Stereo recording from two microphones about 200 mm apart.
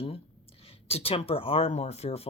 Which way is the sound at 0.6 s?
30° left (ahead or behind).